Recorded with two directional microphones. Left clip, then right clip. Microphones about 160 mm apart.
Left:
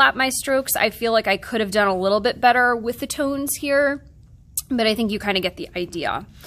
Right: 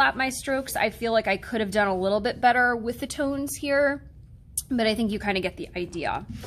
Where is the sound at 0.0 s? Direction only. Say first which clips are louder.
Left 6 dB; 40° left (ahead or behind).